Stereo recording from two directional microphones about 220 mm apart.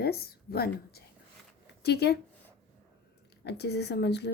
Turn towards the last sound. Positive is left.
turn(degrees=50)  # may be behind; listen again after turning